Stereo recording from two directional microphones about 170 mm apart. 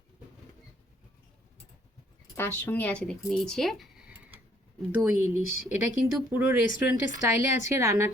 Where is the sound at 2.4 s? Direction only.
10° left (ahead or behind).